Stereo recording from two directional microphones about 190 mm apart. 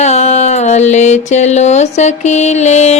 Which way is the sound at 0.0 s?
35° left (ahead or behind).